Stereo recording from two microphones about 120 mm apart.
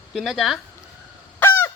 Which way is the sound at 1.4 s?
20° left (ahead or behind).